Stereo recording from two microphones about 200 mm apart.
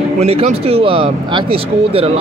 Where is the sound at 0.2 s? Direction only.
30° right (ahead or behind).